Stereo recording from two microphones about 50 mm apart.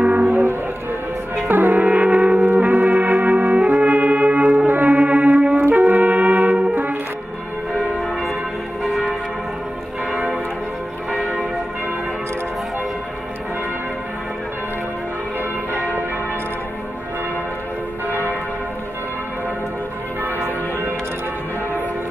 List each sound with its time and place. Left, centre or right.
0.0 s music: right
1.3 s music: right
2.7 s brass instrument: right
4.6 s music: right
5.4 s brass instrument: right
8.1 s church bell: centre